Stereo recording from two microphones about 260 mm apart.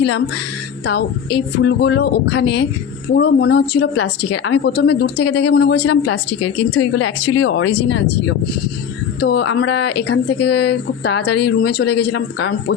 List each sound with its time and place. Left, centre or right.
0.9 s speech: left
6.4 s speech: left
7.4 s speech: left